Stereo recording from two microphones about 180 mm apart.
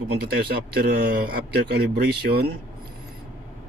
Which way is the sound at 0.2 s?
60° right (ahead or behind).